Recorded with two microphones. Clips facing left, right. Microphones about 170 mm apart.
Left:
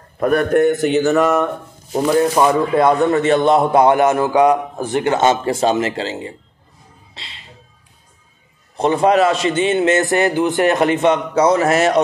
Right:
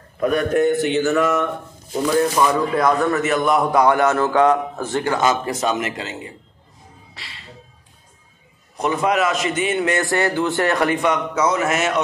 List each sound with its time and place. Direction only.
0.2 s a man's voice: 55° left (ahead or behind); by 1.5 s 40° left (ahead or behind)
2.3 s a man's voice: 25° left (ahead or behind)
7.2 s music: 20° left (ahead or behind)
8.7 s a man's voice: 30° left (ahead or behind)